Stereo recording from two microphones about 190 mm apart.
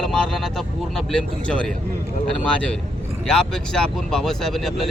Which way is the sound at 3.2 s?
5° left (ahead or behind).